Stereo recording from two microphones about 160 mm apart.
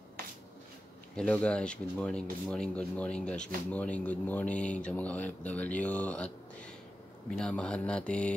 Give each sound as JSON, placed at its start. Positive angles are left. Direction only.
{"t": 1.1, "sound": "speech", "side_deg": 5}